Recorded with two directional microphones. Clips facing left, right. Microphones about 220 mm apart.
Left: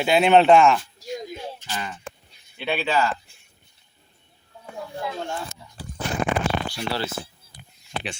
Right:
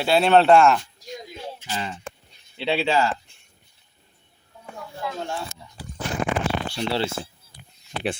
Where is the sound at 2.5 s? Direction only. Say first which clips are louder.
Right 2 dB; 25° right (ahead or behind).